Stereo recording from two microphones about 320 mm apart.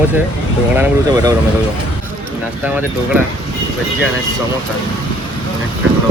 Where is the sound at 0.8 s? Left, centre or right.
Centre.